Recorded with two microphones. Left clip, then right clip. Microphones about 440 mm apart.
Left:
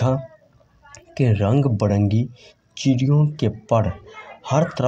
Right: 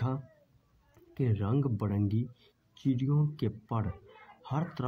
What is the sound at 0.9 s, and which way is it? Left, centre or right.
Speech, right.